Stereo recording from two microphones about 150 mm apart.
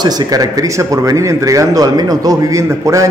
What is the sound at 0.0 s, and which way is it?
Speech, 25° right (ahead or behind).